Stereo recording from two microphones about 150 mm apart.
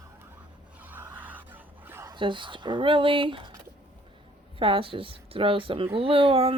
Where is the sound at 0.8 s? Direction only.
10° right (ahead or behind).